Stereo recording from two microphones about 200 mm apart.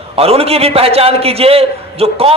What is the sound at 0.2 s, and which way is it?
A man's voice, 30° right (ahead or behind).